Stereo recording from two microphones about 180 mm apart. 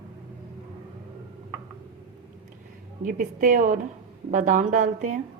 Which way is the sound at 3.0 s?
50° right (ahead or behind).